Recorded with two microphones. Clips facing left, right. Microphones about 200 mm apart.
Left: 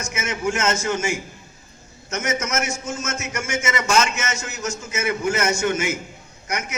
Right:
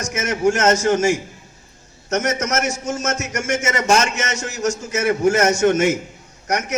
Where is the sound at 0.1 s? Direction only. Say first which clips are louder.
Right 7 dB; 40° right (ahead or behind).